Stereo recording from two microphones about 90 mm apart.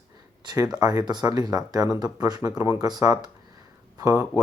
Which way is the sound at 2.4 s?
30° right (ahead or behind).